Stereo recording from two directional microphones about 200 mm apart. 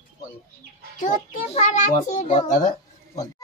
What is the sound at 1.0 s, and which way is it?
A child's voice, 40° left (ahead or behind).